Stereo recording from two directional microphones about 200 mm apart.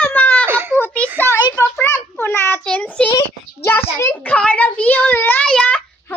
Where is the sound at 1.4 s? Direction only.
20° left (ahead or behind).